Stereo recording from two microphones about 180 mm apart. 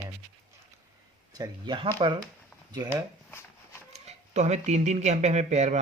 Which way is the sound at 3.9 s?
40° right (ahead or behind).